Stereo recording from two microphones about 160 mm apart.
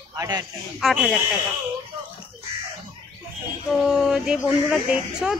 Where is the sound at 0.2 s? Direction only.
20° right (ahead or behind).